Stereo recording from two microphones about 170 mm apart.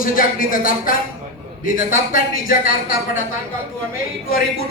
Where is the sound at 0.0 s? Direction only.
55° left (ahead or behind).